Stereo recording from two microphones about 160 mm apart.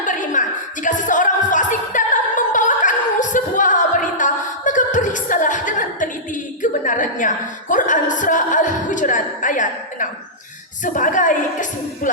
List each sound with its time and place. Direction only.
0.0 s music: 55° left (ahead or behind)
6.6 s a woman's voice: 55° left (ahead or behind)